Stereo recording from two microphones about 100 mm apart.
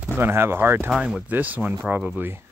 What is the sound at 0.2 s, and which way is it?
Speech, 25° right (ahead or behind).